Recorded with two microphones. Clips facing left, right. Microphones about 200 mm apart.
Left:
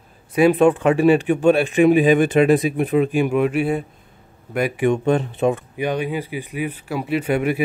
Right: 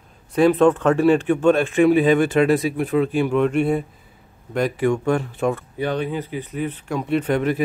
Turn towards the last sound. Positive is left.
turn(degrees=10)  # may be behind; listen again after turning